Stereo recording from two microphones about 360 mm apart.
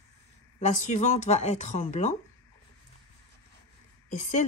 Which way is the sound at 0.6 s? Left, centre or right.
Centre.